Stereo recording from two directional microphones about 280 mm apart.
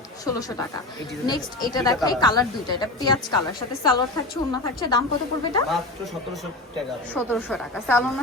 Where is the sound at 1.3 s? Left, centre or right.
Centre.